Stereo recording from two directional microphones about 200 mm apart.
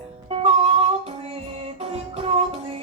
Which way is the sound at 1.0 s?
30° right (ahead or behind).